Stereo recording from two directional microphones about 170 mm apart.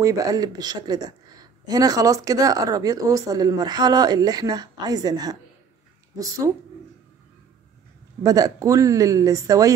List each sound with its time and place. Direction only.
0.0 s speech: 20° right (ahead or behind)
8.2 s speech: 20° right (ahead or behind)